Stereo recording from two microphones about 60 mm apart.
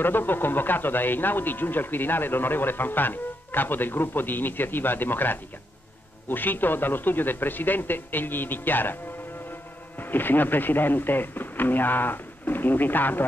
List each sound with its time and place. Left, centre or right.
0.0 s speech: left
9.9 s speech: left